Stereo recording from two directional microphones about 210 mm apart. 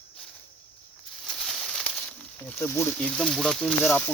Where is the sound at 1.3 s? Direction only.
Centre (ahead or behind).